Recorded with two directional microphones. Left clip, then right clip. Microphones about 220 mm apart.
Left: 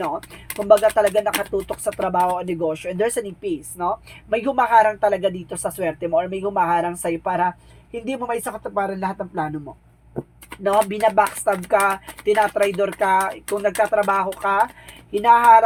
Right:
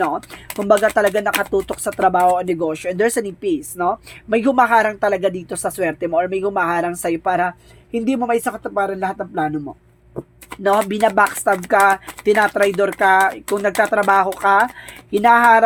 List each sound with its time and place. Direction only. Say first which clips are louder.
0.7 s speech: even; 40° right (ahead or behind)
10.6 s speech: right 2 dB; 45° right (ahead or behind)